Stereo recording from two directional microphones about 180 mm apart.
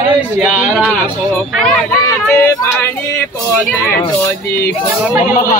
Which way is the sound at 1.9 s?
15° left (ahead or behind).